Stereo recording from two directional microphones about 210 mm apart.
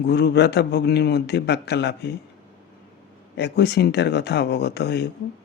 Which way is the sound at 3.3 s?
55° left (ahead or behind).